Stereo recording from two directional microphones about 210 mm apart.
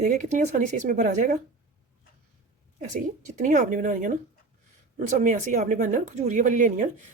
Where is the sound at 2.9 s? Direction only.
35° right (ahead or behind).